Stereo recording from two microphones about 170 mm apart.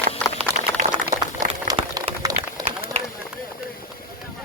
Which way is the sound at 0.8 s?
55° right (ahead or behind).